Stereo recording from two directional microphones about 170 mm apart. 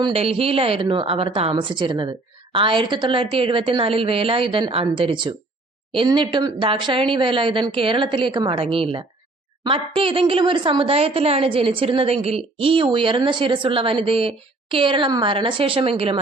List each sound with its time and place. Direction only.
0.0 s speech: 35° right (ahead or behind)